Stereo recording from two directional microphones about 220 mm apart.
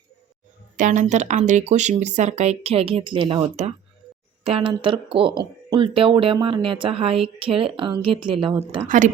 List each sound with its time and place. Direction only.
0.8 s a woman's voice: 35° right (ahead or behind)